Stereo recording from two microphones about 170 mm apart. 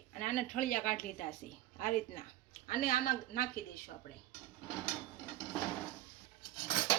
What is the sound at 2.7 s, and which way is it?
Speech, 55° left (ahead or behind).